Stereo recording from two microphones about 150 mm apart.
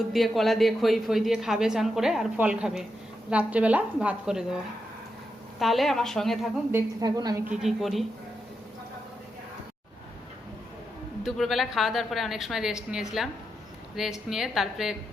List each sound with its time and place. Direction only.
0.1 s a woman's voice: centre (ahead or behind)
5.5 s speech: centre (ahead or behind)
6.7 s a woman's voice: 15° right (ahead or behind)
7.4 s speech: 5° right (ahead or behind)
11.2 s speech: centre (ahead or behind)